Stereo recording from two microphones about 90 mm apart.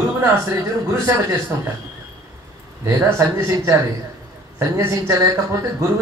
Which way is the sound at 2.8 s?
30° right (ahead or behind).